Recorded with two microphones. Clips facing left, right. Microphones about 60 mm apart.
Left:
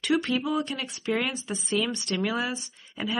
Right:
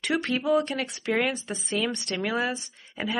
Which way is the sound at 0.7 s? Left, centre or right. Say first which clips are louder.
Right 1 dB; right.